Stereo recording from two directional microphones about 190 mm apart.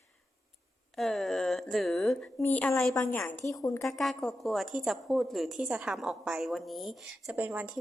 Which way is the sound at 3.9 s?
Centre (ahead or behind).